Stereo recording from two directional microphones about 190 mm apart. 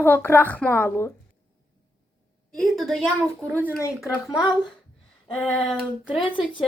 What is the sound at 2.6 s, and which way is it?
A woman's voice, centre (ahead or behind).